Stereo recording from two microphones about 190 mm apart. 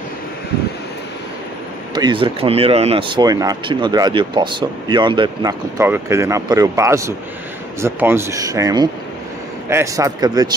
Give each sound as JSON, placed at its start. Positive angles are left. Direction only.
{"t": 2.0, "sound": "speech", "side_deg": -25}